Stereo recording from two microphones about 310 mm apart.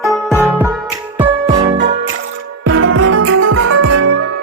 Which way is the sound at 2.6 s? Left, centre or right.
Right.